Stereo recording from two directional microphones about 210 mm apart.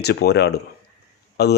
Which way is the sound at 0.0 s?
50° left (ahead or behind).